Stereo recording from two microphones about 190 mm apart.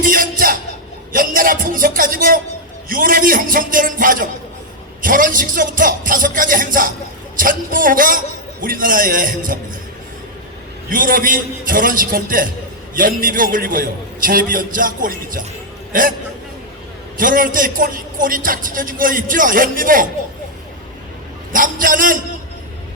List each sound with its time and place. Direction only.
0.0 s music: 45° right (ahead or behind)
1.1 s a man's voice: 45° right (ahead or behind)
10.8 s a man's voice: 45° right (ahead or behind)
17.2 s a man's voice: 45° right (ahead or behind)
21.5 s a man's voice: 45° right (ahead or behind)